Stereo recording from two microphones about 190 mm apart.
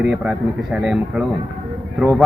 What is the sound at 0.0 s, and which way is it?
A man's voice, 5° right (ahead or behind).